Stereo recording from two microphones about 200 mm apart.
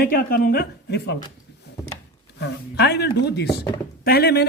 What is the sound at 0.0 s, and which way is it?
Speech, 50° left (ahead or behind).